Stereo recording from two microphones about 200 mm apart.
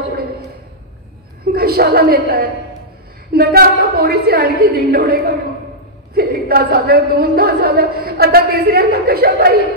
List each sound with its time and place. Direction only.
1.4 s a woman's voice: 50° right (ahead or behind)